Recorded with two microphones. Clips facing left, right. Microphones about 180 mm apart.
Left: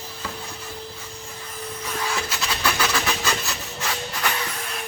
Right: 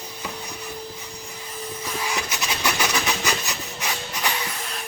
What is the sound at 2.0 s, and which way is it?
Rub, 20° right (ahead or behind).